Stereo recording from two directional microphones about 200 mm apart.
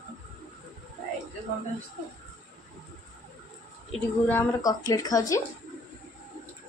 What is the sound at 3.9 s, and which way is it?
A woman's voice, 10° left (ahead or behind).